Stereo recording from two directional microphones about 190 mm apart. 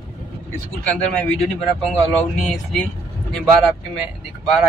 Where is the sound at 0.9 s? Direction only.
5° left (ahead or behind).